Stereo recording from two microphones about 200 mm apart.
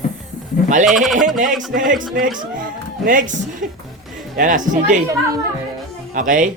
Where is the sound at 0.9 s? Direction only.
Centre (ahead or behind).